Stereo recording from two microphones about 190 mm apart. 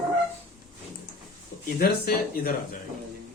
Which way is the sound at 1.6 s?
50° left (ahead or behind).